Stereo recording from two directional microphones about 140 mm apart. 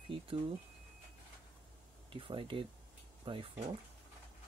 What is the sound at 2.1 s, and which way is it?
Speech, 40° right (ahead or behind).